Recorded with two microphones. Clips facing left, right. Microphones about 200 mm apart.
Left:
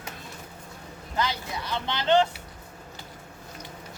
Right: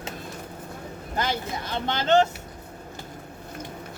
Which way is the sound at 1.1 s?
50° right (ahead or behind).